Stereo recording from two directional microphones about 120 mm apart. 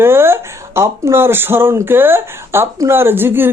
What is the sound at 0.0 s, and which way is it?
Speech, 20° right (ahead or behind).